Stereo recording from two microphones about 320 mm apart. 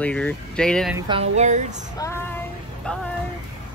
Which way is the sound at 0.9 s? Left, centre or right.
Centre.